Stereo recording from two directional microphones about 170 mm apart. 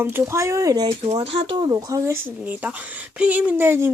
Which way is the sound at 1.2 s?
35° right (ahead or behind).